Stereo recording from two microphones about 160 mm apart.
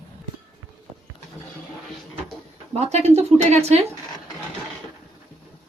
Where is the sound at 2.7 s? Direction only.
45° right (ahead or behind).